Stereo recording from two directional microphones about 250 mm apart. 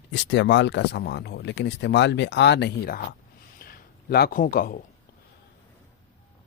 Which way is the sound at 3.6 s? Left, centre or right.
Left.